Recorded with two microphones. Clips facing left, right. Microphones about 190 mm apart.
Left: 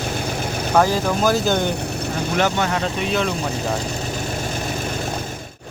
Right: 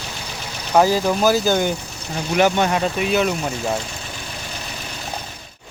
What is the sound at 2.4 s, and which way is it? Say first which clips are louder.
Speech: right 4 dB; 20° right (ahead or behind).